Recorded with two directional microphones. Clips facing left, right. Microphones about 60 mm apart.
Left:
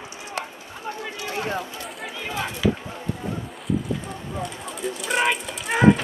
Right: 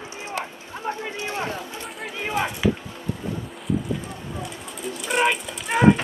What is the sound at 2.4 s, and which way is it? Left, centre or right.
Chop, right.